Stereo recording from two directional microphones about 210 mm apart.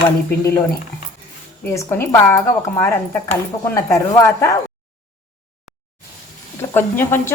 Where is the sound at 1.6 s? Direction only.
10° left (ahead or behind).